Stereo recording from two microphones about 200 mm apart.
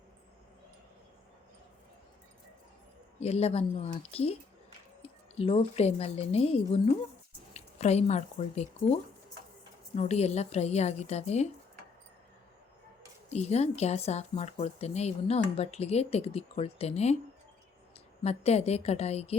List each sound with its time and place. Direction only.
3.2 s a woman's voice: 30° left (ahead or behind)
13.3 s a woman's voice: 30° left (ahead or behind)
18.2 s a woman's voice: 30° left (ahead or behind)